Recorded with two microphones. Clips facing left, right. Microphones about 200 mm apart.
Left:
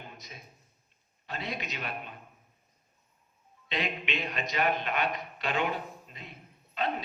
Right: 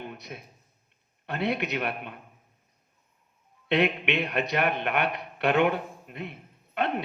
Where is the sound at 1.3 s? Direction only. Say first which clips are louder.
Right 9 dB; 60° right (ahead or behind).